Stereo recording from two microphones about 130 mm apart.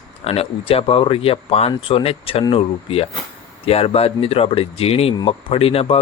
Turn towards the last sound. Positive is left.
turn(degrees=50)  # may be behind; listen again after turning